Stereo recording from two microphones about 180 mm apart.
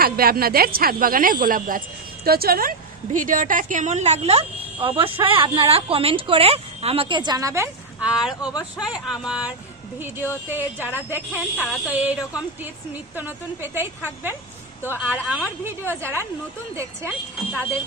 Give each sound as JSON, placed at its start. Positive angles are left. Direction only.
{"t": 0.0, "sound": "a woman's voice", "side_deg": -55}
{"t": 8.1, "sound": "speech", "side_deg": -5}
{"t": 10.9, "sound": "a woman's voice", "side_deg": -10}
{"t": 11.5, "sound": "speech", "side_deg": 5}
{"t": 11.9, "sound": "a woman's voice", "side_deg": -10}